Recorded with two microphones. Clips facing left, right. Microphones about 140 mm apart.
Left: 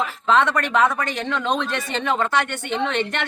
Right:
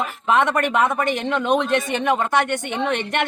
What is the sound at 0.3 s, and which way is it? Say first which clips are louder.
Speech: right 1 dB; 15° right (ahead or behind).